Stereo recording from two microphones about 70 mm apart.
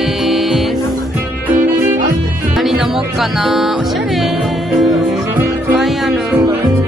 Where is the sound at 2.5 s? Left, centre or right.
Centre.